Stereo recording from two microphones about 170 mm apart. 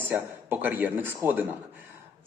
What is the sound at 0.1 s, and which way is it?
A man's voice, 10° right (ahead or behind).